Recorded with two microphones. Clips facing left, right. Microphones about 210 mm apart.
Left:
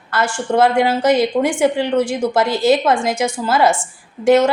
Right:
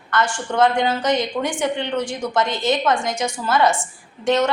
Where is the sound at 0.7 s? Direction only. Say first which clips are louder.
Left 5 dB; 30° left (ahead or behind).